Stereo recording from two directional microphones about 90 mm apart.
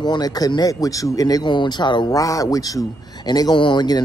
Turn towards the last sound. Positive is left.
turn(degrees=50)  # may be behind; listen again after turning